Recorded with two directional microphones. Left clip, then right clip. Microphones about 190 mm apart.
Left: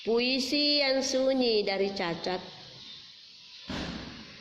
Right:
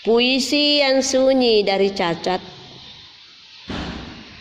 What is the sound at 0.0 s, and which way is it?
Speech, 40° right (ahead or behind).